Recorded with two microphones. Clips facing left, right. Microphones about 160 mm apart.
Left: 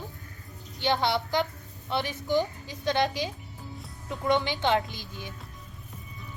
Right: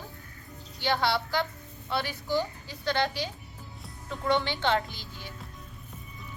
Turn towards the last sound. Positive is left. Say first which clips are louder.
# left 3 dB
turn(degrees=15)  # may be behind; listen again after turning